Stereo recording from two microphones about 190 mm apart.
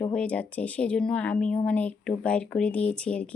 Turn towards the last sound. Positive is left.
turn(degrees=5)  # may be behind; listen again after turning